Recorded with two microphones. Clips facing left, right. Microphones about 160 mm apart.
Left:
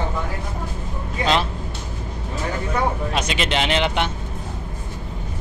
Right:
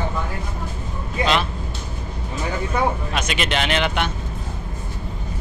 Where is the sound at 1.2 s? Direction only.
35° left (ahead or behind).